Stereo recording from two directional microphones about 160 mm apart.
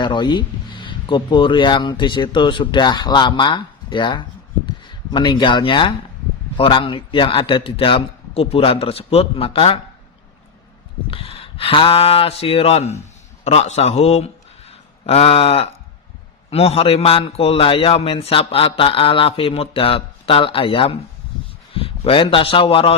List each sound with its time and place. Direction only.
0.0 s a man's voice: 30° left (ahead or behind)
11.1 s a man's voice: 35° left (ahead or behind)